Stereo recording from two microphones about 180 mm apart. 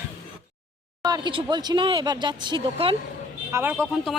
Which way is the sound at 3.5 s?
15° right (ahead or behind).